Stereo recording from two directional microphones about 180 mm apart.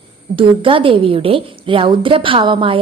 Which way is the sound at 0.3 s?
30° right (ahead or behind).